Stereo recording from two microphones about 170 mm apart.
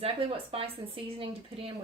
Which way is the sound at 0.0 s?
35° right (ahead or behind).